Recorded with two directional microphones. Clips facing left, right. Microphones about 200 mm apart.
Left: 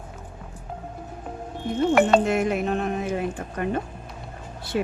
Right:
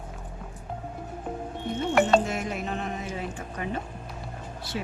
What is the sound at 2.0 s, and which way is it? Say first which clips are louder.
Speech: left 2 dB; 60° left (ahead or behind).